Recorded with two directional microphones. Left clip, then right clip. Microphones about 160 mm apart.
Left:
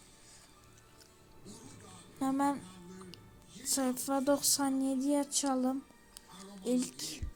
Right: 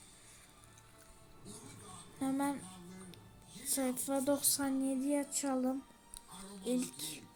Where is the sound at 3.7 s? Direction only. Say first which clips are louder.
Left 3 dB; 20° left (ahead or behind).